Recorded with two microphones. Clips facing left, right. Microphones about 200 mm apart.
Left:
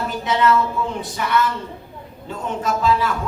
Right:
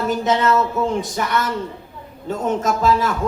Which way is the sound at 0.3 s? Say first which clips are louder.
Left 2 dB; 45° right (ahead or behind).